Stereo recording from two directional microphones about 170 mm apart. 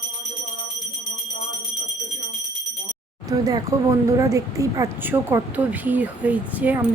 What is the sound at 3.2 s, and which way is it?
Speech, 20° right (ahead or behind).